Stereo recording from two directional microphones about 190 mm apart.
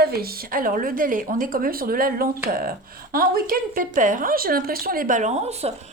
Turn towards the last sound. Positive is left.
turn(degrees=-35)  # may be behind; listen again after turning